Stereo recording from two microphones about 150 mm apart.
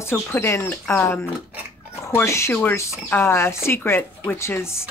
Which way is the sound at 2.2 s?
20° left (ahead or behind).